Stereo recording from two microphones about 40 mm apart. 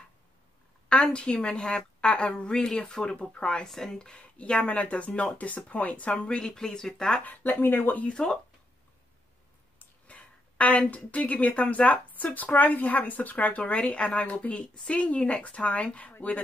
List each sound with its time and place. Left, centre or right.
0.8 s a woman's voice: left
3.6 s speech: centre
4.1 s speech: left
6.1 s a woman's voice: left
7.2 s speech: left
8.1 s speech: centre
10.0 s speech: left